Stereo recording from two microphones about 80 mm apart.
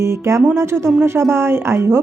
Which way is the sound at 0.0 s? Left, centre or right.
Right.